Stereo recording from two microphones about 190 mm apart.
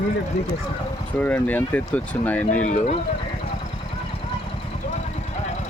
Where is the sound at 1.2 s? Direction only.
10° left (ahead or behind).